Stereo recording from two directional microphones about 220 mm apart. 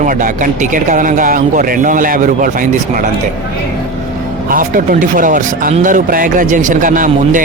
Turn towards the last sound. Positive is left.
turn(degrees=-35)  # may be behind; listen again after turning